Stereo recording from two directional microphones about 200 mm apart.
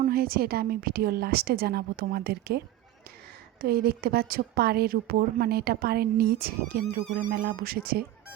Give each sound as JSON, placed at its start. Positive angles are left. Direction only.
{"t": 0.0, "sound": "a woman's voice", "side_deg": -50}